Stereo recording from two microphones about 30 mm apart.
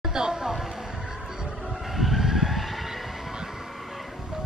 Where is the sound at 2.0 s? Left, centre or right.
Centre.